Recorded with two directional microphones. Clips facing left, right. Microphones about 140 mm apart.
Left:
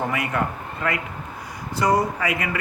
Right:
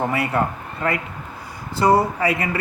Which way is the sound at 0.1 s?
30° right (ahead or behind).